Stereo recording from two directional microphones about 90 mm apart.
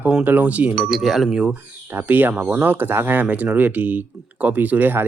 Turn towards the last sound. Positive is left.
turn(degrees=-20)  # may be behind; listen again after turning